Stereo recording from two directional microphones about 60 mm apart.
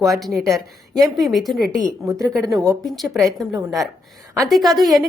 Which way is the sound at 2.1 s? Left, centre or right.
Right.